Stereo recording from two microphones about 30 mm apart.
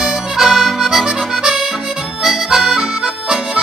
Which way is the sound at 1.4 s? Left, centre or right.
Centre.